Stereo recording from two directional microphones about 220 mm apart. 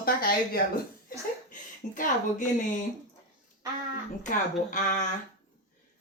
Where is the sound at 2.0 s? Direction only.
35° left (ahead or behind).